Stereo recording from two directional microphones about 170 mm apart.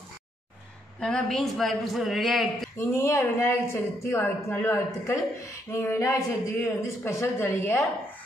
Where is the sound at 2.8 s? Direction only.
15° left (ahead or behind).